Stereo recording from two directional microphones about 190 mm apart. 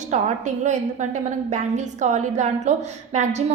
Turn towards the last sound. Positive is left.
turn(degrees=-35)  # may be behind; listen again after turning